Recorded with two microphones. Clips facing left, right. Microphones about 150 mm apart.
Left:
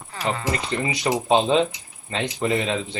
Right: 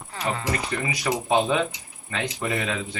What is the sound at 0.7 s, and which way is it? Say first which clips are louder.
Speech: left 3 dB; 25° left (ahead or behind).